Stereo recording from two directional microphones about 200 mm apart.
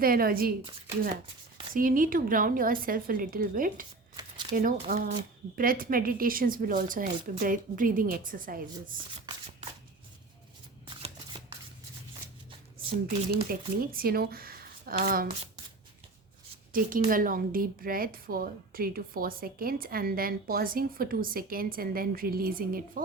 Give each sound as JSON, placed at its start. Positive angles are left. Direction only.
{"t": 0.0, "sound": "a woman's voice", "side_deg": -45}
{"t": 1.7, "sound": "a woman's voice", "side_deg": -45}
{"t": 4.2, "sound": "a sound", "side_deg": -20}
{"t": 4.5, "sound": "a woman's voice", "side_deg": -45}
{"t": 10.8, "sound": "shuffling cards", "side_deg": -30}
{"t": 13.3, "sound": "speech", "side_deg": -45}
{"t": 16.7, "sound": "a woman's voice", "side_deg": -45}